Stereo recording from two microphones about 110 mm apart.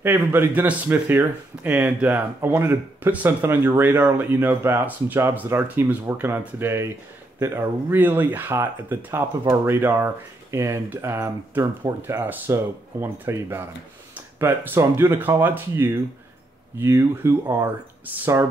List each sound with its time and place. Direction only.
0.0 s speech: 20° right (ahead or behind)